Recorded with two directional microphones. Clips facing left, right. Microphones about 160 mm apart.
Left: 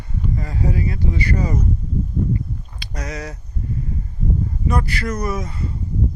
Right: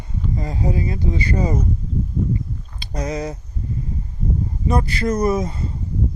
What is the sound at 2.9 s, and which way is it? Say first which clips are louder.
Speech: right 5 dB; 25° right (ahead or behind).